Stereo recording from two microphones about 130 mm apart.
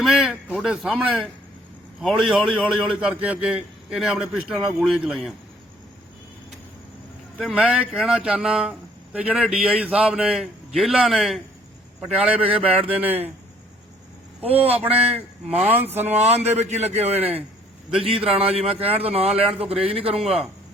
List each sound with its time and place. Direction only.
0.0 s a man's voice: 5° right (ahead or behind)
7.4 s a man's voice: 5° right (ahead or behind)
14.4 s a man's voice: 50° right (ahead or behind)
15.4 s a man's voice: 15° right (ahead or behind)
16.0 s a man's voice: 55° right (ahead or behind)